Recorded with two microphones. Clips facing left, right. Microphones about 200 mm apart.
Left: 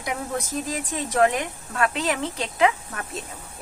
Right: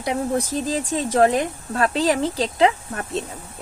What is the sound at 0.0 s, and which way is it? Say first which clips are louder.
Speech: right 6 dB; 30° right (ahead or behind).